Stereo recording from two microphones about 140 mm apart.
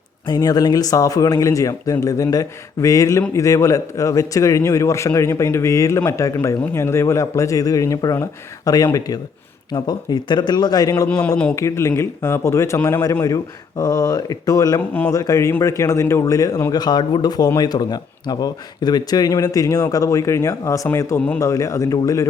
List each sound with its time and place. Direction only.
0.3 s a man's voice: 25° left (ahead or behind)